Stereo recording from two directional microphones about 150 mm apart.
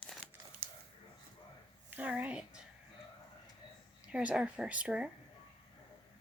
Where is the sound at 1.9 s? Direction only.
10° right (ahead or behind).